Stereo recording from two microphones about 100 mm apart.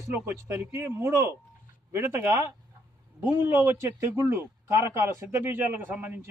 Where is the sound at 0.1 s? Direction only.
25° right (ahead or behind).